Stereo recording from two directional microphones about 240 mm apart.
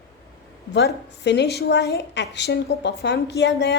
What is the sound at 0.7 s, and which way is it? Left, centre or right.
A woman's voice, left.